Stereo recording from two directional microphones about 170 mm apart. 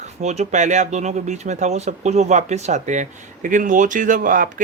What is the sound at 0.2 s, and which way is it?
Speech, 40° right (ahead or behind).